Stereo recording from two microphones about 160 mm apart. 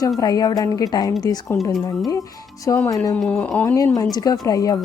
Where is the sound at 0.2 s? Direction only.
25° left (ahead or behind).